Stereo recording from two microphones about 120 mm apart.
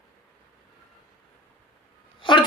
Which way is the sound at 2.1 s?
45° left (ahead or behind).